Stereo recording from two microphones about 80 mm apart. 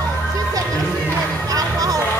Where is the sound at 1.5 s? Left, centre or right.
Right.